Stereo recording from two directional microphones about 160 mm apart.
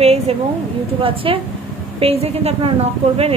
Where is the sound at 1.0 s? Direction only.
35° right (ahead or behind).